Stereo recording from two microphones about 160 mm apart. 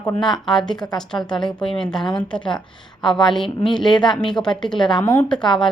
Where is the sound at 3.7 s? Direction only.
25° left (ahead or behind).